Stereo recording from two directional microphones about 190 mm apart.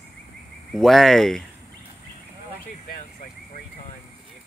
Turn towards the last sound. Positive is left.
turn(degrees=45)  # may be behind; listen again after turning